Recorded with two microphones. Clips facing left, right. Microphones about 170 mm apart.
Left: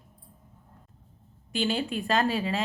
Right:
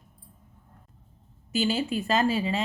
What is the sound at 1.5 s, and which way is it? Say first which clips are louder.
A woman's voice: right 2 dB; 5° right (ahead or behind).